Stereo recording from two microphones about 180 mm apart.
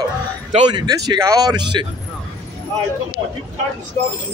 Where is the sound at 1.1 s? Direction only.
20° right (ahead or behind).